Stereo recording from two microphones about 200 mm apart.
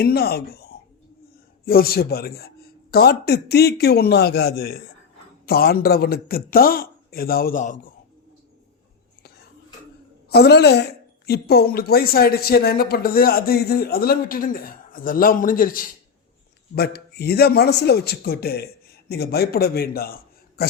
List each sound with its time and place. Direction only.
0.0 s speech: 50° left (ahead or behind)
10.2 s a woman's voice: 55° left (ahead or behind)